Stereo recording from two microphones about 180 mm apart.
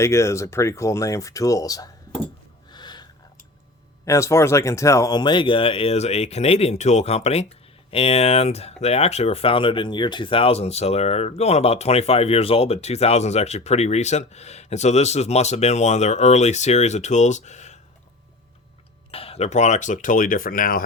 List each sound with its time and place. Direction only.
0.0 s speech: 15° left (ahead or behind)
2.7 s a sound: 25° left (ahead or behind)
4.0 s speech: 15° left (ahead or behind); by 17.7 s 40° left (ahead or behind)
19.1 s speech: 35° left (ahead or behind); by 20.8 s 50° left (ahead or behind)